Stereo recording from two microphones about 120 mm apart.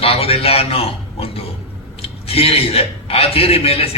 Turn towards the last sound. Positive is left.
turn(degrees=55)  # may be behind; listen again after turning